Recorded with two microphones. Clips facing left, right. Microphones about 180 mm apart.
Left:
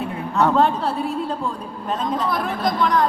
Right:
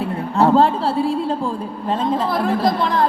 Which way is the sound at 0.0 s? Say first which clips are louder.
Right 3 dB; 30° right (ahead or behind).